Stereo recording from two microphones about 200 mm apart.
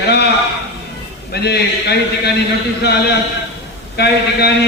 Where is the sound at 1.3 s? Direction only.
55° left (ahead or behind).